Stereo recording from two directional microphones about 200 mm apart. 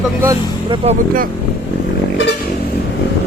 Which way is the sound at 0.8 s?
30° right (ahead or behind).